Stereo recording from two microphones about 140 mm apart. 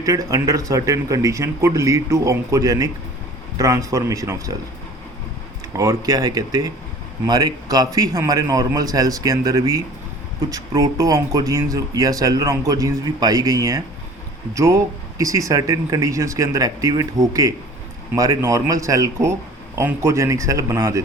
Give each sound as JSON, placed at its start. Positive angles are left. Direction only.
{"t": 0.0, "sound": "speech", "side_deg": -25}
{"t": 5.7, "sound": "speech", "side_deg": -25}